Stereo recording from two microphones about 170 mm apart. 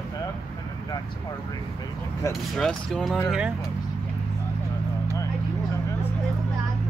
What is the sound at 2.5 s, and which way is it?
Speech, centre (ahead or behind).